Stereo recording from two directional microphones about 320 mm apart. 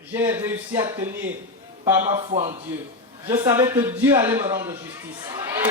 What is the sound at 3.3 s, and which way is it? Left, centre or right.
A man's voice, centre.